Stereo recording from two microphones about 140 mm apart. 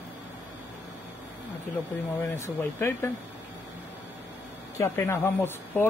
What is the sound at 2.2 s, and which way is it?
Speech, 15° left (ahead or behind).